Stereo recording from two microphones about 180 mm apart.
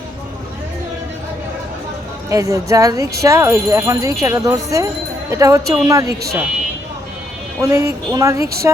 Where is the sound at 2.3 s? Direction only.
20° right (ahead or behind).